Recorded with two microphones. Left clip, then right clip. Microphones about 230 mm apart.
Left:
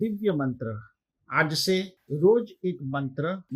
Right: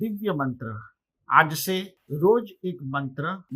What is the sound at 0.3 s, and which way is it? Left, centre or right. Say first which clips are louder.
Speech: even; centre.